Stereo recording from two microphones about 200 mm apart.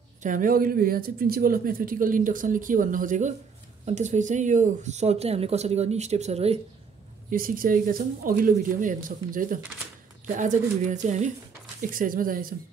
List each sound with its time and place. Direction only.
0.2 s speech: 40° right (ahead or behind)
7.2 s speech: 45° right (ahead or behind)